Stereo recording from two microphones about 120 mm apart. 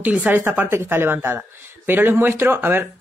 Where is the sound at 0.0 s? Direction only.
10° right (ahead or behind).